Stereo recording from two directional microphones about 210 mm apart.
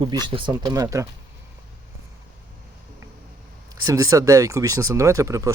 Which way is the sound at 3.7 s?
15° right (ahead or behind).